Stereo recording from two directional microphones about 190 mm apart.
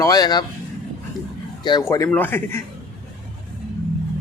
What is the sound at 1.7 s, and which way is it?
Speech, 20° left (ahead or behind).